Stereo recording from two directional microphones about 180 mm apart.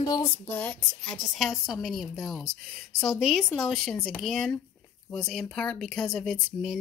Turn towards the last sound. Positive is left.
turn(degrees=0)  # may be behind; listen again after turning